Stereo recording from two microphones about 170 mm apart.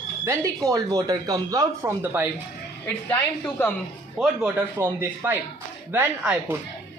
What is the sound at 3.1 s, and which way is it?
Speech, 10° left (ahead or behind).